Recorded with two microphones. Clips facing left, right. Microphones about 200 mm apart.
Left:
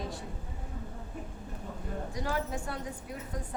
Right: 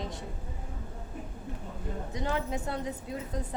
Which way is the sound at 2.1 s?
20° right (ahead or behind).